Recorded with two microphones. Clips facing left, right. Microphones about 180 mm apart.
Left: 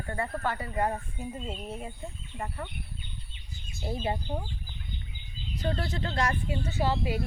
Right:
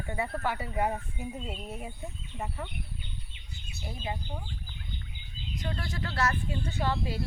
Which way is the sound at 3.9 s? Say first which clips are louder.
Left 6 dB; 35° left (ahead or behind).